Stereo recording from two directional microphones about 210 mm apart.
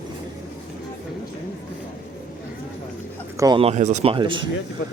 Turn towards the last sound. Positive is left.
turn(degrees=-25)  # may be behind; listen again after turning